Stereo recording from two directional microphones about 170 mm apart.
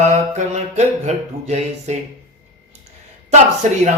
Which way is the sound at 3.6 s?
45° right (ahead or behind).